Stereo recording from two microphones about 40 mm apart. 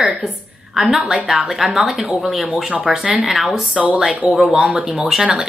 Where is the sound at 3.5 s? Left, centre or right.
Right.